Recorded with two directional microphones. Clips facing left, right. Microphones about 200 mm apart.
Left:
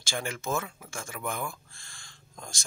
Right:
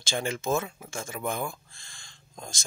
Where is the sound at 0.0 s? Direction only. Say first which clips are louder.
Right 4 dB; 20° right (ahead or behind).